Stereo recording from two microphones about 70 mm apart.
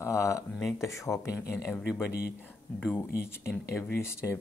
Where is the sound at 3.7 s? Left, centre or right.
Left.